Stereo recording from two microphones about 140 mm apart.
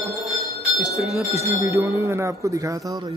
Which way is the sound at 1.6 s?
20° right (ahead or behind).